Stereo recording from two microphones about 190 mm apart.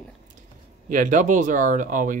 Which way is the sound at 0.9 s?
45° right (ahead or behind).